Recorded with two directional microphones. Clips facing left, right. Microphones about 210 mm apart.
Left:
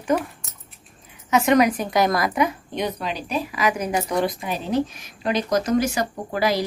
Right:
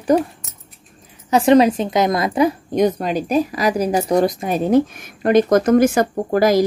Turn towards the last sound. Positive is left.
turn(degrees=-45)  # may be behind; listen again after turning